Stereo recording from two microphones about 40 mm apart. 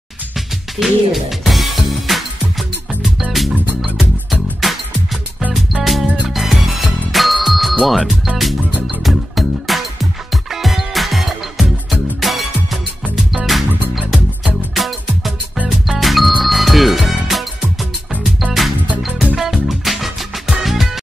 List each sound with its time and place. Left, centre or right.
0.7 s music: centre
8.0 s speech: centre
8.8 s music: centre
14.8 s music: centre
19.3 s music: centre